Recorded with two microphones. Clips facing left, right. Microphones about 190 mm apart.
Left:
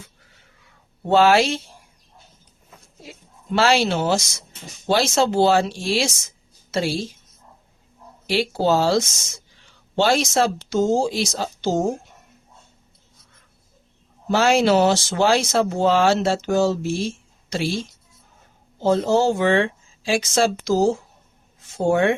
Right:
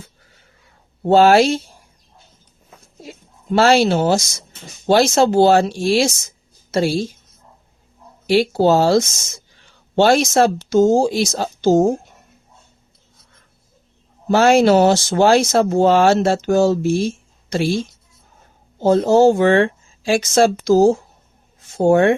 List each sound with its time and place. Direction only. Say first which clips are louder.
0.6 s a sound: right 8 dB; 40° right (ahead or behind)
3.5 s speech: right 5 dB; 45° right (ahead or behind)
8.3 s speech: right 6 dB; 45° right (ahead or behind)
14.3 s speech: right 5 dB; 50° right (ahead or behind)
18.8 s speech: right 6 dB; 45° right (ahead or behind)